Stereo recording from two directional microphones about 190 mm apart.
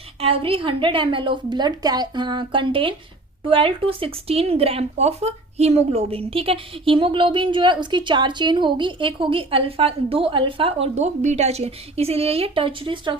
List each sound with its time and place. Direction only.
0.2 s speech: 30° right (ahead or behind)